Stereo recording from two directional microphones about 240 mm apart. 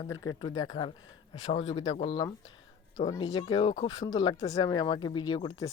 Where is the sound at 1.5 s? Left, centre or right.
Left.